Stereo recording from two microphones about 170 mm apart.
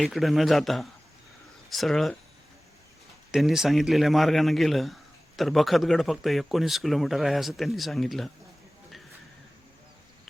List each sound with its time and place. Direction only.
0.0 s speech: centre (ahead or behind)
3.3 s speech: centre (ahead or behind)